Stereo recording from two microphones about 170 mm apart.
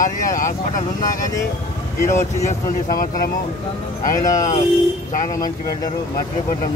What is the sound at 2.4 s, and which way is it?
Speech, 50° left (ahead or behind).